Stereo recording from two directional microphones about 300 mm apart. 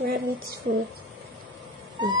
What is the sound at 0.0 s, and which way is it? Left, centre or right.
Speech, right.